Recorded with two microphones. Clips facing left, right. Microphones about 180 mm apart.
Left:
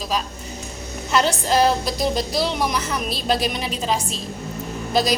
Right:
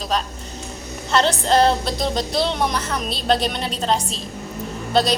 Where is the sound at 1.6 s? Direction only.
30° right (ahead or behind).